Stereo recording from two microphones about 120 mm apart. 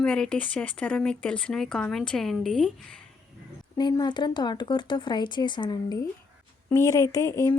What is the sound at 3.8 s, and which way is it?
Speech, 35° left (ahead or behind).